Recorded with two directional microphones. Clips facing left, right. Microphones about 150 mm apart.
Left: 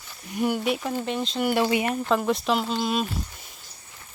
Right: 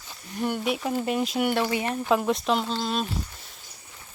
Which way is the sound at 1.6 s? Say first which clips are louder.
Left 3 dB; 15° left (ahead or behind).